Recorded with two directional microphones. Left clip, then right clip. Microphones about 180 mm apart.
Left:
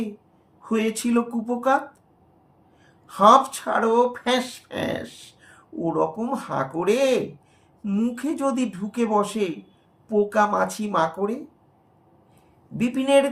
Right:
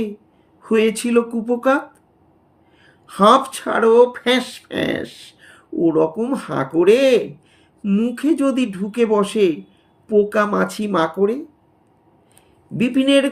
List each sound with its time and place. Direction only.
0.6 s speech: 55° right (ahead or behind)
2.8 s speech: 55° right (ahead or behind)
12.7 s speech: 55° right (ahead or behind)